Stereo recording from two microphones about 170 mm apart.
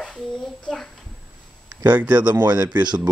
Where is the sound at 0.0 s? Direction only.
Centre (ahead or behind).